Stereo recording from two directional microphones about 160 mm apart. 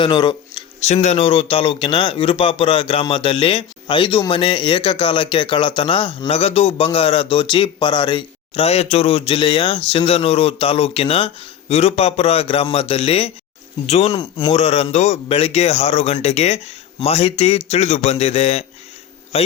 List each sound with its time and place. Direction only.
0.0 s speech: 30° left (ahead or behind)
0.8 s speech: 45° left (ahead or behind)